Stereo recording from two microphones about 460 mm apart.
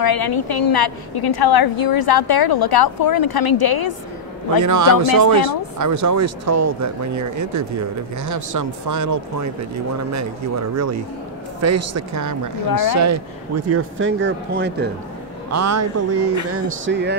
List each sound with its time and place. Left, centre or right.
0.0 s a woman's voice: left
4.6 s speech: right
13.7 s speech: right
15.5 s speech: right